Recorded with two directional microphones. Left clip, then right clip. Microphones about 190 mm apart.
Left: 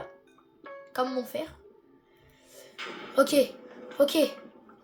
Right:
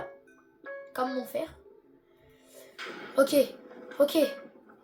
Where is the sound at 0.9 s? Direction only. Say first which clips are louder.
Left 1 dB; 30° left (ahead or behind).